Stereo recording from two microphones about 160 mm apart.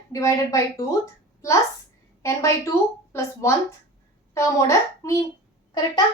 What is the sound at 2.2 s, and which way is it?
A woman's voice, 20° left (ahead or behind).